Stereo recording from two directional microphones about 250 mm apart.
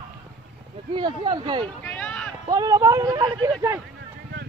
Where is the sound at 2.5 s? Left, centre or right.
Centre.